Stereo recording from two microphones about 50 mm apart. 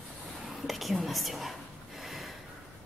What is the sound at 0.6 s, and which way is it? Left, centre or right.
Whispering, centre.